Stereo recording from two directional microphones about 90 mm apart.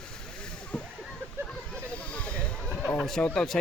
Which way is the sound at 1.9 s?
15° left (ahead or behind).